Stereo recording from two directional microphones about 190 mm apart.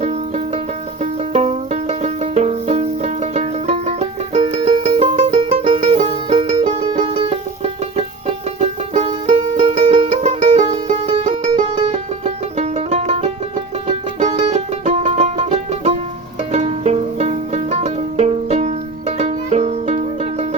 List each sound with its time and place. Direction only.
0.0 s music: 35° right (ahead or behind)